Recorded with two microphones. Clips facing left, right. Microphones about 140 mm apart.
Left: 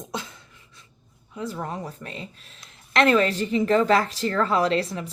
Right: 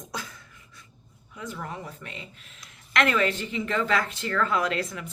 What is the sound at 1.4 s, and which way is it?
A woman's voice, 30° left (ahead or behind).